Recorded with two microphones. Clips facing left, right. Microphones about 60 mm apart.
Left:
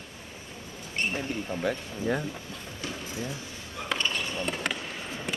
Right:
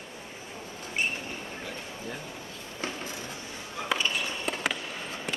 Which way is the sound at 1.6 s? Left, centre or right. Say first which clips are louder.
Left 8 dB; left.